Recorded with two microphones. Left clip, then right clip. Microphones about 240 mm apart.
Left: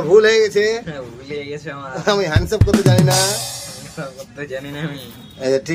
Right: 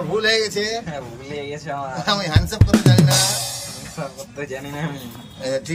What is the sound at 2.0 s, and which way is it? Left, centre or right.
Speech, centre.